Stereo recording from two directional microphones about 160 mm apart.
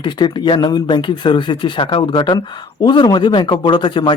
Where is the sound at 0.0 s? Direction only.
30° left (ahead or behind).